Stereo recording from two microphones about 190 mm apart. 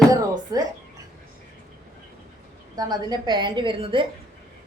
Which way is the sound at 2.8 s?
20° right (ahead or behind).